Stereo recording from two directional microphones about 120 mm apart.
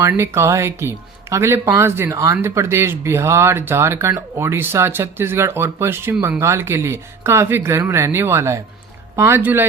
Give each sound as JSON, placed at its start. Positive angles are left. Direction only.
{"t": 0.0, "sound": "speech", "side_deg": -20}